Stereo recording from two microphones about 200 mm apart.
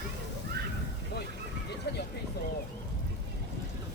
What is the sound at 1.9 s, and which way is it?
Vehicle, 60° left (ahead or behind).